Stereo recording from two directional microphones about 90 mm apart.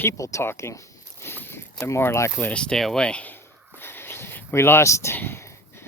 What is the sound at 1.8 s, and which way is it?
Speech, 30° left (ahead or behind).